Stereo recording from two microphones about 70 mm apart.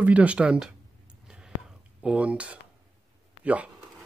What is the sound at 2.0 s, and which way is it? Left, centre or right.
Speech, centre.